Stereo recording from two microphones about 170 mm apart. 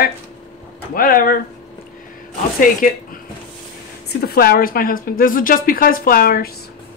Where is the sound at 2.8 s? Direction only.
55° left (ahead or behind).